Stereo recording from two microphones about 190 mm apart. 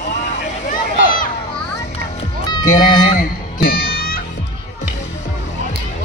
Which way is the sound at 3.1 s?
50° left (ahead or behind).